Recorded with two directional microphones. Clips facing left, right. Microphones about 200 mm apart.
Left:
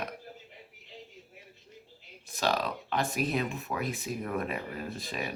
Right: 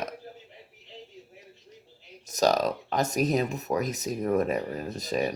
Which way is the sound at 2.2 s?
40° right (ahead or behind).